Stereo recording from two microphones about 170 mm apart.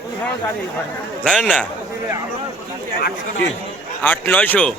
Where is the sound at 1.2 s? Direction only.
5° left (ahead or behind).